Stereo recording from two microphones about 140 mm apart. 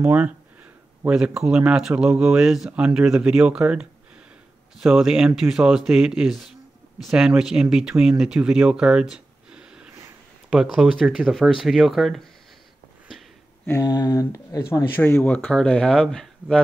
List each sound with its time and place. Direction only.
0.0 s speech: 10° right (ahead or behind)
9.1 s a sound: 5° right (ahead or behind)
10.5 s speech: 5° right (ahead or behind)
13.7 s speech: 25° left (ahead or behind); by 16.6 s 5° left (ahead or behind)